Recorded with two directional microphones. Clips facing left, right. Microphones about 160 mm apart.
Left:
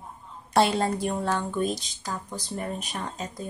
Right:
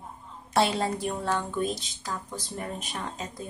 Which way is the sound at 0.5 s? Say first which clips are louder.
Left 3 dB; centre (ahead or behind).